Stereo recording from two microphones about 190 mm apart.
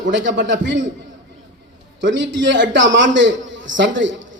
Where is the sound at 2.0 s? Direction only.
75° right (ahead or behind).